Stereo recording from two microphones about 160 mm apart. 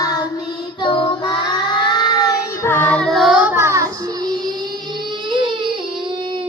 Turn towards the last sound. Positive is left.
turn(degrees=-30)  # may be behind; listen again after turning